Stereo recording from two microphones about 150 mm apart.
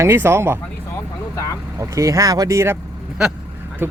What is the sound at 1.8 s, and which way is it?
Speech, 20° right (ahead or behind).